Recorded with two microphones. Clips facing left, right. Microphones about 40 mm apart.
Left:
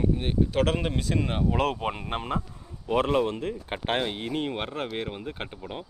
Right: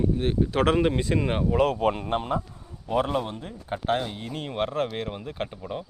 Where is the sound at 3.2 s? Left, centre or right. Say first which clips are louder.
Left 7 dB; left.